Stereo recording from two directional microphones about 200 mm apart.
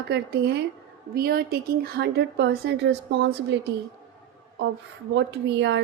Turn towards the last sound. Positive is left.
turn(degrees=-60)  # may be behind; listen again after turning